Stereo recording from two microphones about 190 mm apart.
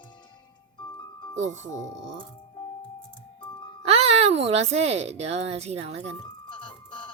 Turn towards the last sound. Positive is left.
turn(degrees=25)  # may be behind; listen again after turning